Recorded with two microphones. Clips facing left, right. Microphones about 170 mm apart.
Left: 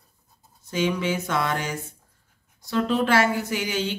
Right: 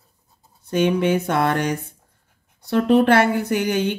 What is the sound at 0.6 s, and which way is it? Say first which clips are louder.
Speech: right 6 dB; 60° right (ahead or behind).